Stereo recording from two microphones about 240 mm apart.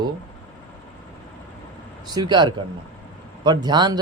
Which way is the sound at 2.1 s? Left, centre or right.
Centre.